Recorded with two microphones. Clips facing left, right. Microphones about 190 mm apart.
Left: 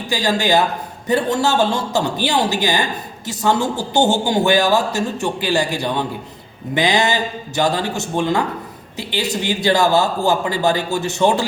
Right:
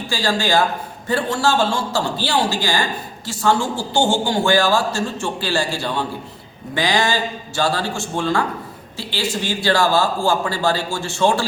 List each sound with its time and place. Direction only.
0.1 s a man's voice: 20° left (ahead or behind)